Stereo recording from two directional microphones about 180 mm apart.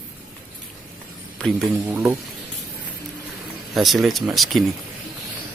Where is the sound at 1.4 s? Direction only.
5° left (ahead or behind).